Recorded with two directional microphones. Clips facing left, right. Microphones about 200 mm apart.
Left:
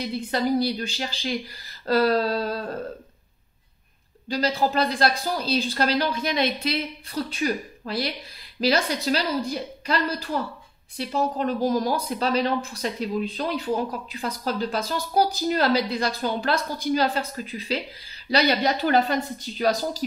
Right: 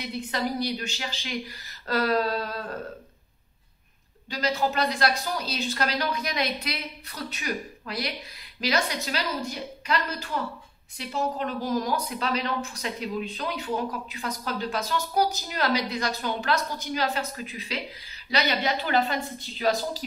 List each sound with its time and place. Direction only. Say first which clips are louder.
0.0 s a woman's voice: left 4 dB; 30° left (ahead or behind)
4.3 s a woman's voice: left 3 dB; 35° left (ahead or behind)